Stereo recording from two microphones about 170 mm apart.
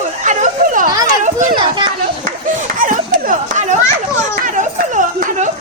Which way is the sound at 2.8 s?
50° right (ahead or behind).